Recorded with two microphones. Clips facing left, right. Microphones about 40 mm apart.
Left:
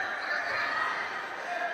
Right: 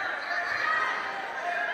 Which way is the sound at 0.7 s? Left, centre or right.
Right.